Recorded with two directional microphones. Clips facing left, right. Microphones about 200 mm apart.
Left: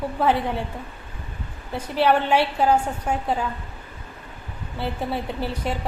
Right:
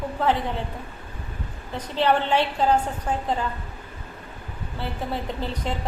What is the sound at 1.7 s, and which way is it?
A woman's voice, 10° left (ahead or behind).